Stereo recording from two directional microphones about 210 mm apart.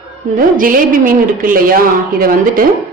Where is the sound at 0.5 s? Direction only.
40° right (ahead or behind).